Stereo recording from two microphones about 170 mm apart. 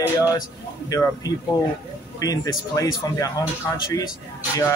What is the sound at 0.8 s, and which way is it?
A man's voice, 20° left (ahead or behind).